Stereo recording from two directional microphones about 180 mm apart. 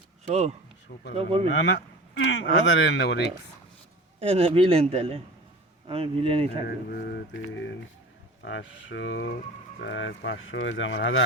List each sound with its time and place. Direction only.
0.3 s a man's voice: 35° right (ahead or behind)
2.1 s speech: 90° left
4.2 s a man's voice: 35° right (ahead or behind)
6.7 s mantra: 65° left (ahead or behind)
8.4 s speech: 90° left